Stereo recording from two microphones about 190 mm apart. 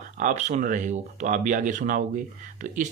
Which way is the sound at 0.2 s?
40° right (ahead or behind).